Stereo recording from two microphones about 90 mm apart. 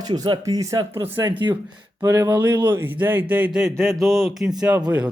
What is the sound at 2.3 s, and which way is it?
Speech, 20° right (ahead or behind).